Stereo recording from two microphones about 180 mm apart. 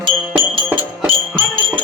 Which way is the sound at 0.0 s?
30° right (ahead or behind).